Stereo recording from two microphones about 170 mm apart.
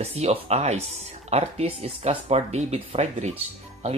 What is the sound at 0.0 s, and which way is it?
Speech, 40° right (ahead or behind).